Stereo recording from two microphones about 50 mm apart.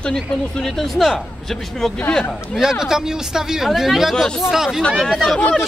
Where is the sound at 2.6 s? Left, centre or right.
Centre.